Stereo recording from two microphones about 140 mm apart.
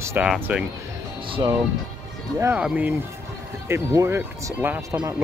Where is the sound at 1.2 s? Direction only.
40° right (ahead or behind).